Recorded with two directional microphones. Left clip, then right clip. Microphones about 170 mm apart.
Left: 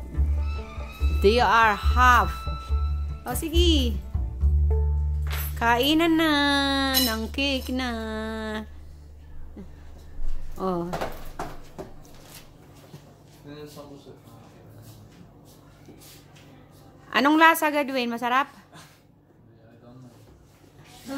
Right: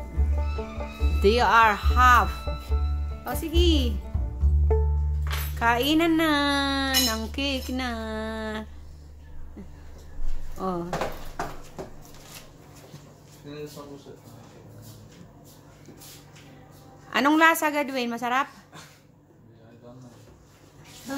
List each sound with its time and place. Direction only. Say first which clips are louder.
0.1 s music: right 1 dB; centre (ahead or behind)
1.2 s speech: even; 20° left (ahead or behind)
2.4 s music: right 1 dB; centre (ahead or behind)
3.3 s speech: left 1 dB; 25° left (ahead or behind)
4.1 s music: right 1 dB; centre (ahead or behind)
5.6 s speech: left 1 dB; 20° left (ahead or behind)
9.6 s a sound: left 1 dB; 20° left (ahead or behind)
10.6 s speech: left 2 dB; 25° left (ahead or behind)
10.9 s a sound: right 1 dB; 15° left (ahead or behind)
17.1 s speech: left 2 dB; 20° left (ahead or behind)